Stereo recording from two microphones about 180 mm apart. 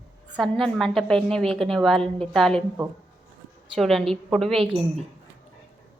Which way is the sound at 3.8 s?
Centre (ahead or behind).